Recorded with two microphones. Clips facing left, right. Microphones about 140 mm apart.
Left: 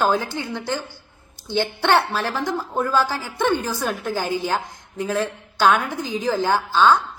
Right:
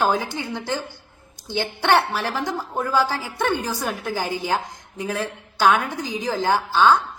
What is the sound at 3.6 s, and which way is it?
Speech, 15° right (ahead or behind).